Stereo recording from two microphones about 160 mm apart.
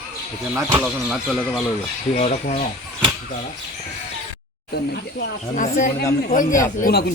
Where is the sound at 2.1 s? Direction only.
45° left (ahead or behind).